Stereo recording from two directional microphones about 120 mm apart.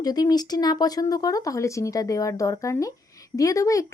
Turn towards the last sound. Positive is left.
turn(degrees=25)  # may be behind; listen again after turning